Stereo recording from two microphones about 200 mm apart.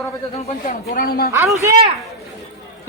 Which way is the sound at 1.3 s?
15° right (ahead or behind).